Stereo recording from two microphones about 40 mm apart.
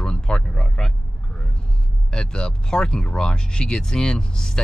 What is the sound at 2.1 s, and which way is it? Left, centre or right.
Speech, left.